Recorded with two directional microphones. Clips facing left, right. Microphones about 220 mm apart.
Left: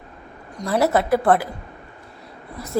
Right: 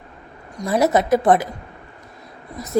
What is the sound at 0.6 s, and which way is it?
Speech, 15° right (ahead or behind).